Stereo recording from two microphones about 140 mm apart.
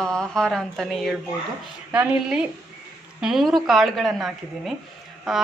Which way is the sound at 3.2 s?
Centre (ahead or behind).